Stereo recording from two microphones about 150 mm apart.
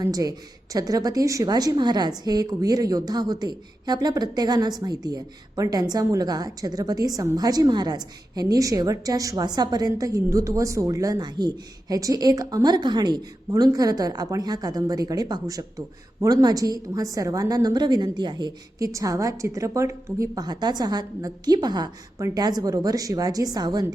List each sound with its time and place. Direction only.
0.0 s a woman's voice: 25° right (ahead or behind)